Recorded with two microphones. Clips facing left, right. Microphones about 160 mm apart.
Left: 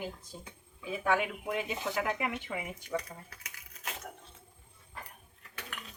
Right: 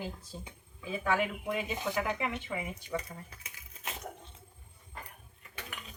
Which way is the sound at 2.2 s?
15° left (ahead or behind).